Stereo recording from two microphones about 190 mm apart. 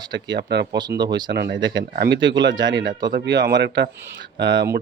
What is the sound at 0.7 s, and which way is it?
Speech, 20° right (ahead or behind).